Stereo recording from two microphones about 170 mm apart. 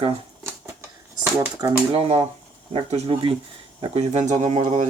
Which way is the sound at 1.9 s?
35° right (ahead or behind).